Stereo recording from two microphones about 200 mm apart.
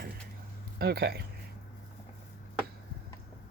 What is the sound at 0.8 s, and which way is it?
Speech, 55° right (ahead or behind).